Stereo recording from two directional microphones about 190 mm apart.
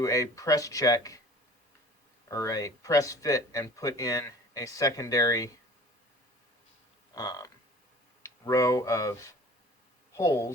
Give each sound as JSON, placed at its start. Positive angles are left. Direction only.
{"t": 0.0, "sound": "speech", "side_deg": 15}
{"t": 2.3, "sound": "speech", "side_deg": 15}
{"t": 7.1, "sound": "a sound", "side_deg": 20}
{"t": 8.2, "sound": "speech", "side_deg": 15}